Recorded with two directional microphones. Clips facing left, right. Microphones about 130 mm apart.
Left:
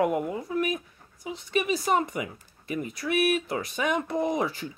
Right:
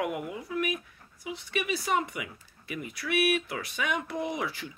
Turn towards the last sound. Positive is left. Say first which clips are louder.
# left 6 dB
turn(degrees=40)  # may be behind; listen again after turning